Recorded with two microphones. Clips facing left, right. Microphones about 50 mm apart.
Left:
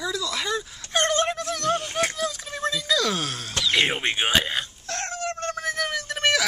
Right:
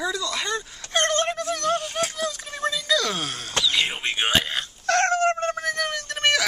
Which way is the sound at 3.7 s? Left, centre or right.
Left.